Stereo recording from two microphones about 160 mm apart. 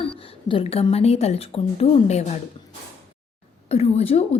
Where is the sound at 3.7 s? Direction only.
40° left (ahead or behind).